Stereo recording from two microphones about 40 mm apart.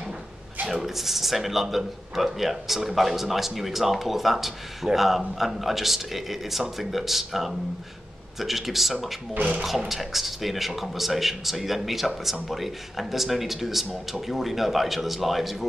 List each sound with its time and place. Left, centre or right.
0.7 s a man's voice: centre
9.3 s speech: right
9.6 s a man's voice: centre